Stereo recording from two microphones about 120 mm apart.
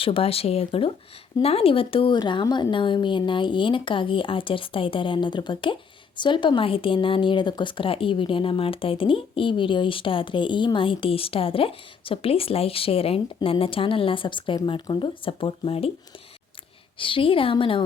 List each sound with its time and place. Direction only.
0.0 s speech: 50° left (ahead or behind)
17.0 s speech: 45° left (ahead or behind)